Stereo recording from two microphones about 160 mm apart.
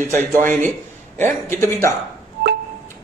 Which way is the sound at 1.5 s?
15° left (ahead or behind).